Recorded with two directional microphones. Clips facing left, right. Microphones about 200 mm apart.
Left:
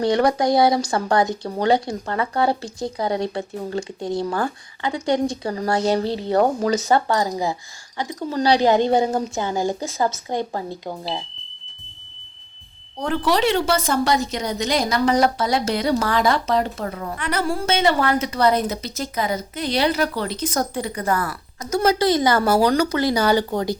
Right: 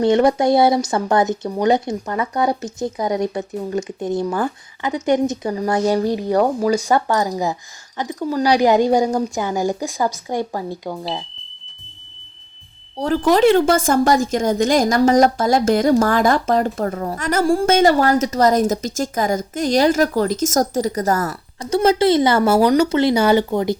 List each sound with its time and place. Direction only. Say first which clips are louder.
0.0 s speech: right 4 dB; 25° right (ahead or behind)
13.0 s a woman's voice: right 6 dB; 35° right (ahead or behind)